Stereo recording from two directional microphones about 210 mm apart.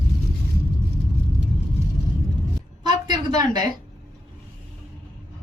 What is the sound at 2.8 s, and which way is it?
Speech, 20° right (ahead or behind).